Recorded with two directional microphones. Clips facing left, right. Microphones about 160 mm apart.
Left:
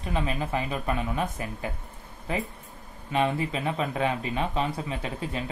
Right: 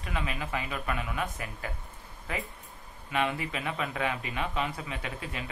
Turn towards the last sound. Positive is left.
turn(degrees=30)  # may be behind; listen again after turning